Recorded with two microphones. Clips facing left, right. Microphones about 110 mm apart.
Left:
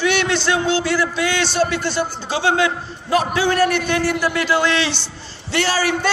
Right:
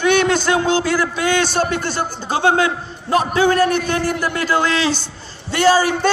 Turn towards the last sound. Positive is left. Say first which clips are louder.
# right 5 dB
turn(degrees=-45)  # may be behind; listen again after turning